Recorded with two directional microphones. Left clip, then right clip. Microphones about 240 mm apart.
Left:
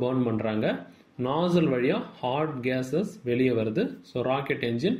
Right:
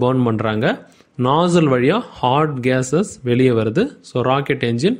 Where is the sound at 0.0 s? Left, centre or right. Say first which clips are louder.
Right 9 dB; right.